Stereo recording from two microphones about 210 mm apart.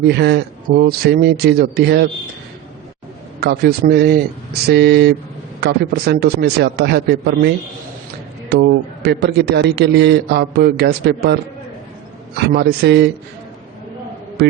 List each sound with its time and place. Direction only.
0.1 s a man's voice: 50° right (ahead or behind)
3.4 s a man's voice: 50° right (ahead or behind)
9.0 s a man's voice: 50° right (ahead or behind)
12.5 s a man's voice: 50° right (ahead or behind)